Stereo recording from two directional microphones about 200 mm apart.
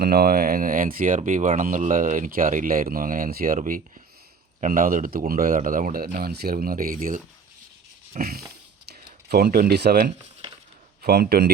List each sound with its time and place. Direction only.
0.0 s speech: 50° right (ahead or behind)
8.2 s speech: 50° right (ahead or behind)
11.0 s speech: 50° right (ahead or behind)